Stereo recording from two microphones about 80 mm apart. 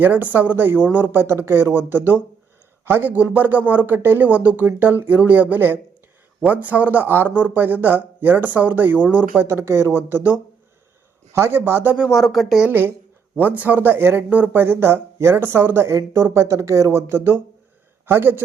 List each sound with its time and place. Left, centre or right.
0.0 s speech: right
9.5 s speech: right
11.3 s speech: right
12.1 s speech: centre
12.6 s a man's voice: right